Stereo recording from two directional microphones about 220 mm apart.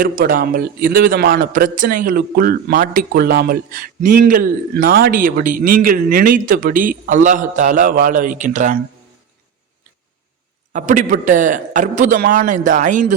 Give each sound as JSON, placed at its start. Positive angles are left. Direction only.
{"t": 0.0, "sound": "a man's voice", "side_deg": -40}
{"t": 10.7, "sound": "a man's voice", "side_deg": -35}